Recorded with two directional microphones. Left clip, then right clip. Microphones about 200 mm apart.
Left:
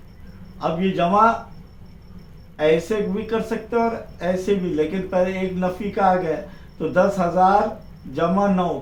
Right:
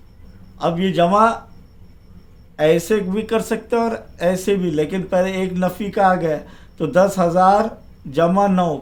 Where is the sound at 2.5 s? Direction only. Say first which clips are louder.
Right 3 dB; 45° right (ahead or behind).